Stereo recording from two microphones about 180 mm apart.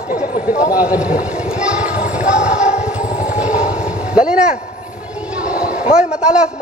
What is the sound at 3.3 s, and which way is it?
Vehicle, 45° left (ahead or behind).